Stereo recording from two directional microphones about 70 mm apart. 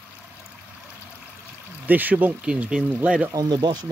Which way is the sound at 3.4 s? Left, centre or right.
Right.